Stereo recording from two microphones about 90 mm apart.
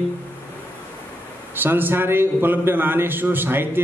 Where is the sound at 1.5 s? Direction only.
20° right (ahead or behind).